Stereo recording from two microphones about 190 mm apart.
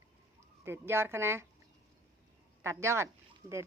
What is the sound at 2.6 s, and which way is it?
Speech, 15° right (ahead or behind).